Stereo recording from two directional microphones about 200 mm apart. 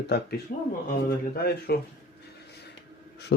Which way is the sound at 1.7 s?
50° left (ahead or behind).